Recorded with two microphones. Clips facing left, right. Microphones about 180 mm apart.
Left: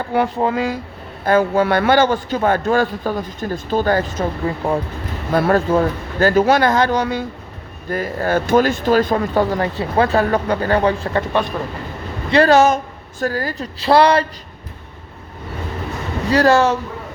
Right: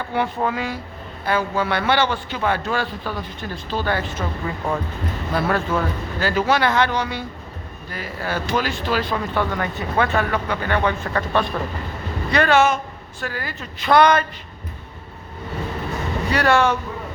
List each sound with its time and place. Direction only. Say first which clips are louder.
0.0 s speech: left 5 dB; 45° left (ahead or behind)
1.2 s a man's voice: left 7 dB; 45° left (ahead or behind); by 11.4 s 25° left (ahead or behind)
12.3 s speech: left 5 dB; 35° left (ahead or behind)
16.3 s speech: left 5 dB; 35° left (ahead or behind)